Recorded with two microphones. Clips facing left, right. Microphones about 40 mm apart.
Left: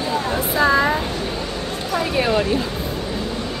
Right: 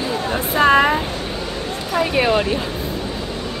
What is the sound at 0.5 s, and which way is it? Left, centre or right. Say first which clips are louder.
Speech: right 3 dB; right.